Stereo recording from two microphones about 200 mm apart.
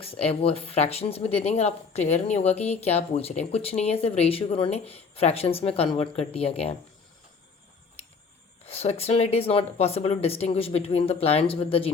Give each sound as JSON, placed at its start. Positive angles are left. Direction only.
{"t": 0.0, "sound": "a woman's voice", "side_deg": 30}
{"t": 8.6, "sound": "speech", "side_deg": 30}